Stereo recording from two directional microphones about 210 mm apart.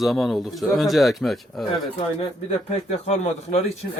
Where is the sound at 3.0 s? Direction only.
30° left (ahead or behind).